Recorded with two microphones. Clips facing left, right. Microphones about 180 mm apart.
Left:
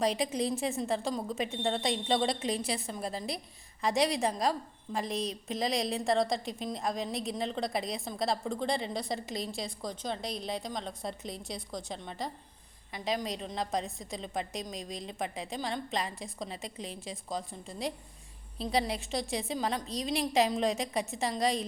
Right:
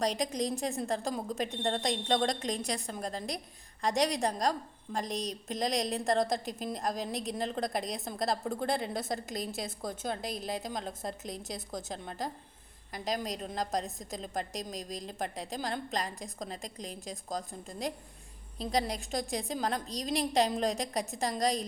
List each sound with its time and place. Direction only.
0.0 s a woman's voice: 5° left (ahead or behind)
16.6 s a woman's voice: 40° right (ahead or behind)
17.0 s a woman's voice: centre (ahead or behind)
18.7 s a woman's voice: 40° right (ahead or behind)
18.9 s a woman's voice: centre (ahead or behind)